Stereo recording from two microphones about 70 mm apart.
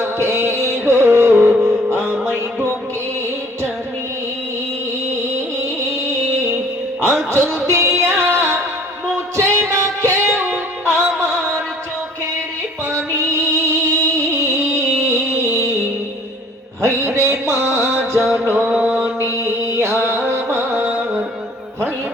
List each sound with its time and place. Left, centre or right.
0.0 s music: right
5.2 s music: right
12.8 s music: right
16.8 s music: right
18.2 s music: centre
18.4 s music: right
18.7 s mantra: right
19.5 s music: right